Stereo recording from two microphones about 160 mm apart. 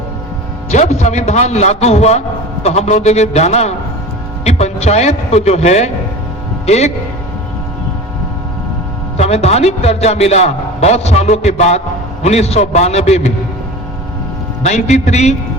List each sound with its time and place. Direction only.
0.7 s a man's voice: 45° left (ahead or behind)
9.1 s a man's voice: 40° left (ahead or behind)
14.6 s a man's voice: 45° left (ahead or behind)